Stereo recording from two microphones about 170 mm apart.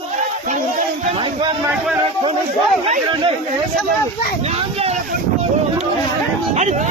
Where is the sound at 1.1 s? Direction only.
30° right (ahead or behind).